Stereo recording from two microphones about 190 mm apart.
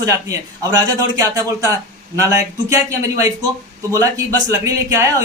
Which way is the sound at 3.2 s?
20° right (ahead or behind).